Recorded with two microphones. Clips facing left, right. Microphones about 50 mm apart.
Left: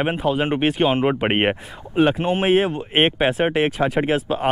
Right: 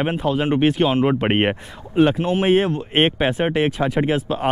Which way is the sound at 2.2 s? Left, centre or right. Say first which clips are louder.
Right 1 dB; left.